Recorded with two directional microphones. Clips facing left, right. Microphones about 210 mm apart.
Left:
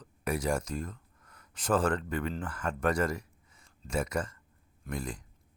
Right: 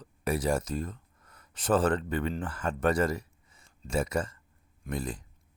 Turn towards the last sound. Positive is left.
turn(degrees=-25)  # may be behind; listen again after turning